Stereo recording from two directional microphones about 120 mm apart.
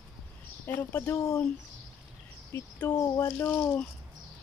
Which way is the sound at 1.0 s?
30° left (ahead or behind).